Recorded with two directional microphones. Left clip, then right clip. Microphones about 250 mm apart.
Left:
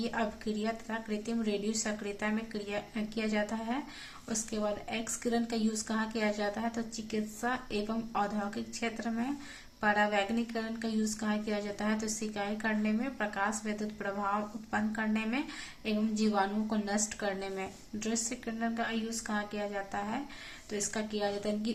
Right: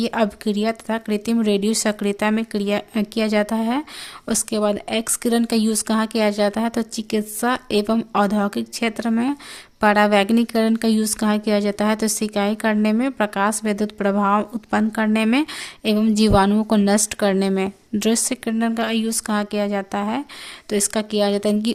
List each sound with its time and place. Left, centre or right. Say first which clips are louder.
0.0 s speech: right 13 dB; right